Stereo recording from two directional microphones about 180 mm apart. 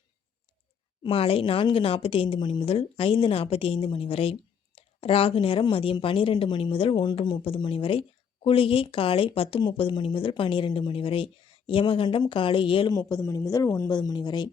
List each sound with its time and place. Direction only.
1.0 s a woman's voice: 30° left (ahead or behind)